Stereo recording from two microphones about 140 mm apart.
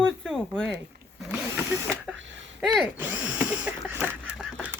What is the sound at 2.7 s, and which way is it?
Speech, 10° right (ahead or behind).